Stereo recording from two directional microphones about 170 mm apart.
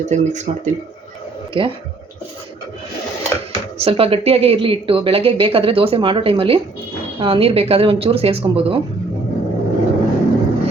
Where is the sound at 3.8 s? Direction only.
35° right (ahead or behind).